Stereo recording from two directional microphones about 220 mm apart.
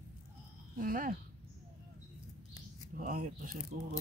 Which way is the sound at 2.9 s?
35° right (ahead or behind).